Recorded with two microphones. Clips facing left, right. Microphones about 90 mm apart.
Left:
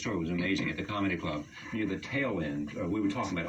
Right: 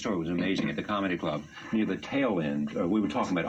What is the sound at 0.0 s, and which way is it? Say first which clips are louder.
Speech: right 3 dB; 45° right (ahead or behind).